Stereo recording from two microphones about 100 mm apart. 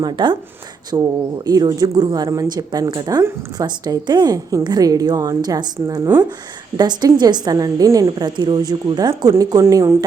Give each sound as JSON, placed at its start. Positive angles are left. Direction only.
{"t": 0.0, "sound": "a woman's voice", "side_deg": -50}
{"t": 8.4, "sound": "a woman's voice", "side_deg": -45}